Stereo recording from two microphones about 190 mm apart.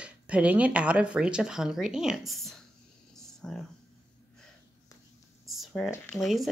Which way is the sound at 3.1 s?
5° left (ahead or behind).